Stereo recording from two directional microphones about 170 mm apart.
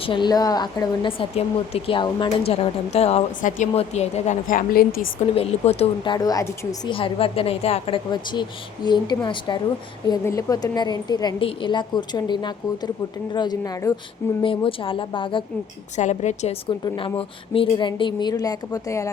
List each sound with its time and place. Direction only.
0.0 s a woman's voice: 30° left (ahead or behind); by 4.9 s 60° left (ahead or behind)
5.3 s a woman's voice: 35° left (ahead or behind)
6.1 s a woman's voice: 20° left (ahead or behind)
6.9 s a woman's voice: 30° left (ahead or behind)
16.0 s a woman's voice: 45° left (ahead or behind)
16.8 s a woman's voice: 25° left (ahead or behind)